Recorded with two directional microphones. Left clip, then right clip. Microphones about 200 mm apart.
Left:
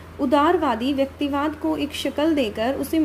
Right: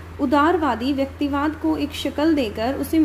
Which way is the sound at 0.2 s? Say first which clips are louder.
Even; 10° left (ahead or behind).